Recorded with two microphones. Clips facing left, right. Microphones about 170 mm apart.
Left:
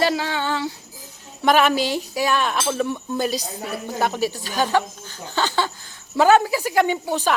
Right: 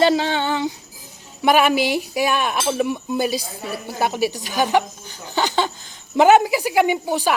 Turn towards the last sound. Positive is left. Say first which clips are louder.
# right 2 dB
turn(degrees=-10)  # may be behind; listen again after turning